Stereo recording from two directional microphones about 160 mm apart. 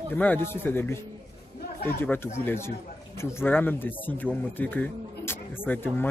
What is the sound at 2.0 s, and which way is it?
Speech, 15° left (ahead or behind).